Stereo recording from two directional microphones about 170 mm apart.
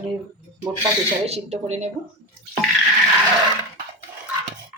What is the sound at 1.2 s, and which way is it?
Speech, 40° right (ahead or behind).